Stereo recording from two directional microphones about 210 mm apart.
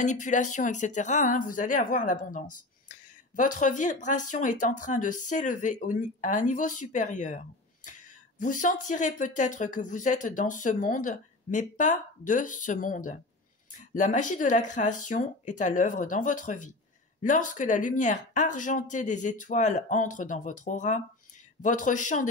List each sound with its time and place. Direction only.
0.0 s speech: 35° left (ahead or behind)